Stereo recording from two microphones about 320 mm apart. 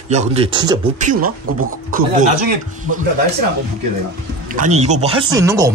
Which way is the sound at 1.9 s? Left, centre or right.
Right.